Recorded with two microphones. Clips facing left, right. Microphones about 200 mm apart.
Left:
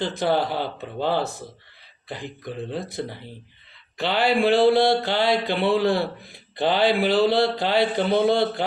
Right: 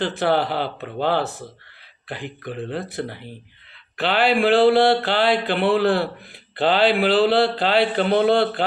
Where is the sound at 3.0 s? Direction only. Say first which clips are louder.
Right 2 dB; 65° right (ahead or behind).